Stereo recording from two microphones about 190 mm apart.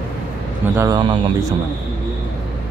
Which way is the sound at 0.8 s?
20° right (ahead or behind).